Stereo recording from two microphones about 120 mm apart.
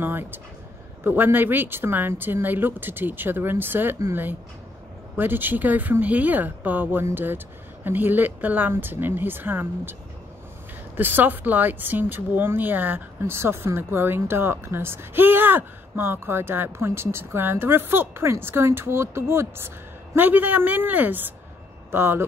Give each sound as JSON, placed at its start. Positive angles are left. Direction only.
{"t": 0.0, "sound": "speech", "side_deg": -15}
{"t": 11.0, "sound": "speech", "side_deg": -15}